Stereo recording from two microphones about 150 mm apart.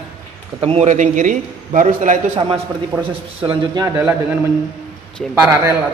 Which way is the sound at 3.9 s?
15° right (ahead or behind).